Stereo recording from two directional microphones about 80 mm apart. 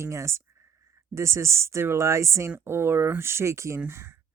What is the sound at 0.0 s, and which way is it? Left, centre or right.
Speech, right.